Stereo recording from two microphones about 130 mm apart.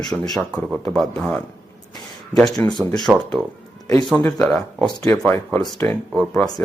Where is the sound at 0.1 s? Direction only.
Centre (ahead or behind).